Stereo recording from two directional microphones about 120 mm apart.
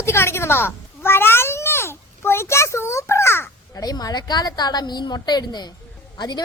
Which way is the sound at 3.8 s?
35° left (ahead or behind).